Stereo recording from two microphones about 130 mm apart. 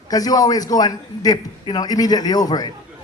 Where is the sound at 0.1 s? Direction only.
30° left (ahead or behind).